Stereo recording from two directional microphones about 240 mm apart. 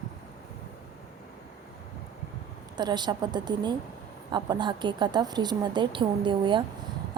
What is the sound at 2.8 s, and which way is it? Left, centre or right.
A woman's voice, centre.